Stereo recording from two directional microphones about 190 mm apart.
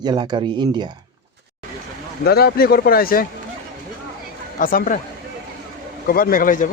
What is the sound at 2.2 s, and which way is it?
Speech, 55° left (ahead or behind).